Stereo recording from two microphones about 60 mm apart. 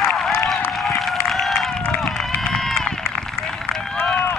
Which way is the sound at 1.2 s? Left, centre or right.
Centre.